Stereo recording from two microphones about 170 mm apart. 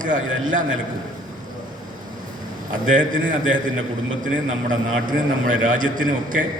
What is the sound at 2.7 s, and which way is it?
Speech, 50° right (ahead or behind).